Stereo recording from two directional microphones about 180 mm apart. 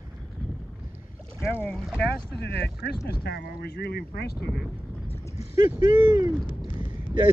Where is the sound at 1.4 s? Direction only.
10° left (ahead or behind).